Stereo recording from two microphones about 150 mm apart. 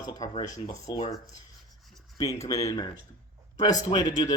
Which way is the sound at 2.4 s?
25° left (ahead or behind).